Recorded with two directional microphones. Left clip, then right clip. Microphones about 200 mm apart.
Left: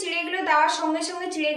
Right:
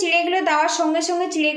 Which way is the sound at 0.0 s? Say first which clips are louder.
Right 8 dB; 50° right (ahead or behind).